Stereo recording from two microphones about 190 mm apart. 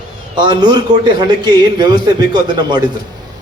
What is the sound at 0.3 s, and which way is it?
A man's voice, 20° right (ahead or behind).